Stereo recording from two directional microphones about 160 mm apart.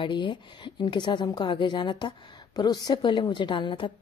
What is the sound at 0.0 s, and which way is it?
A woman's voice, 30° left (ahead or behind).